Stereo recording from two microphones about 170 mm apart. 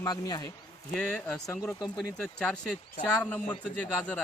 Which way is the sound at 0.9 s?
5° left (ahead or behind).